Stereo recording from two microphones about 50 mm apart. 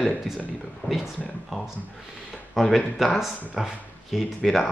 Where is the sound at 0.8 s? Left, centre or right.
Left.